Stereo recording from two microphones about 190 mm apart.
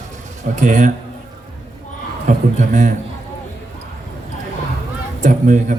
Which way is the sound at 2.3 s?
40° right (ahead or behind).